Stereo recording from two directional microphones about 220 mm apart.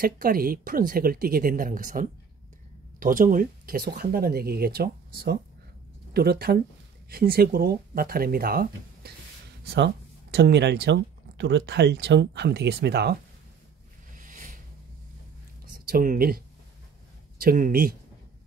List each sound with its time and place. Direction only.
0.0 s speech: 40° right (ahead or behind)
14.1 s a sound: 35° right (ahead or behind)
15.7 s speech: 40° right (ahead or behind)